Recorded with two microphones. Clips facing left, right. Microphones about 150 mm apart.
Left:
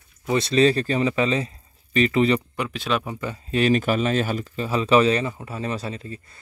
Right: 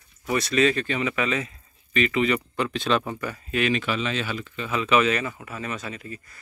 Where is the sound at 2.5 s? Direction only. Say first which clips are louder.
Right 1 dB; 10° left (ahead or behind).